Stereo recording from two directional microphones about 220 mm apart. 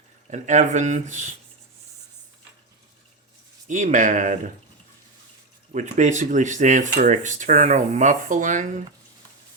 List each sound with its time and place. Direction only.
0.3 s speech: 35° right (ahead or behind)
3.7 s speech: 35° right (ahead or behind)
5.7 s speech: 35° right (ahead or behind)